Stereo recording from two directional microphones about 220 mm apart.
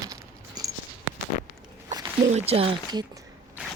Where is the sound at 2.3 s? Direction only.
30° right (ahead or behind).